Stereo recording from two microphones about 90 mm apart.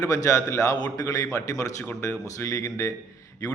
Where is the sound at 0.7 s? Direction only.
50° left (ahead or behind).